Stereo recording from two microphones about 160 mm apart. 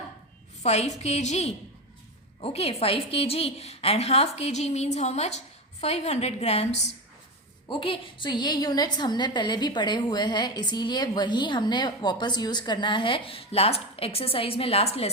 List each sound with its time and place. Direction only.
0.6 s a woman's voice: 45° left (ahead or behind)